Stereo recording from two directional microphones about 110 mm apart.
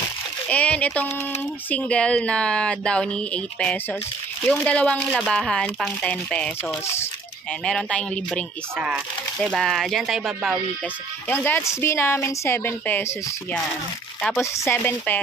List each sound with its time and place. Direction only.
0.5 s speech: 10° left (ahead or behind)
8.7 s speech: 10° right (ahead or behind)
11.2 s speech: 15° left (ahead or behind)